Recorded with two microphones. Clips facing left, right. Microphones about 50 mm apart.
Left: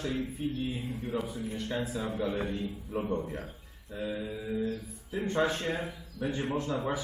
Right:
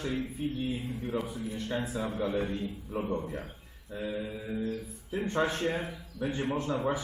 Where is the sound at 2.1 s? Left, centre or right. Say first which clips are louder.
Right 2 dB; centre.